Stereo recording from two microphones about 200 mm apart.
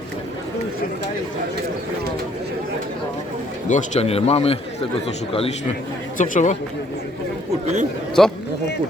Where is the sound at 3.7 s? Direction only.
35° left (ahead or behind).